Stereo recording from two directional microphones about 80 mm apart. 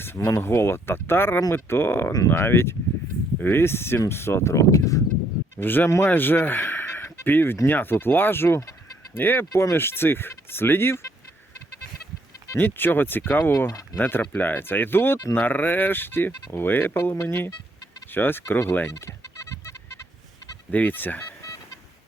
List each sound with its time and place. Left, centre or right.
0.0 s speech: left
5.5 s speech: left
9.5 s speech: left
9.7 s speech: left
12.5 s speech: left
20.7 s speech: left